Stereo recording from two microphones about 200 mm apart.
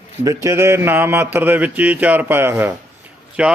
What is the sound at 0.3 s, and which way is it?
Speech, 15° right (ahead or behind).